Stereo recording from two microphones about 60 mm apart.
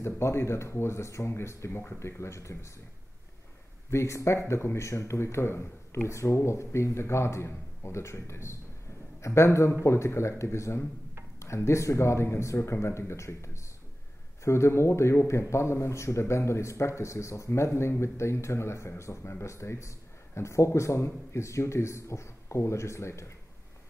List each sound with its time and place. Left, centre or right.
0.0 s speech: left
3.9 s speech: left